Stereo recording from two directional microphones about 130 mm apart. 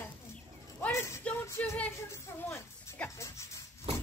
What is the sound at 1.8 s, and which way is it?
Music, 15° left (ahead or behind).